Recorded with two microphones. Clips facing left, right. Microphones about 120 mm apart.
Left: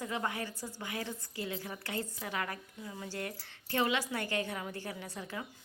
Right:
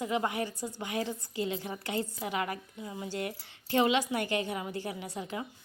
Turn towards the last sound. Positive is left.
turn(degrees=-20)  # may be behind; listen again after turning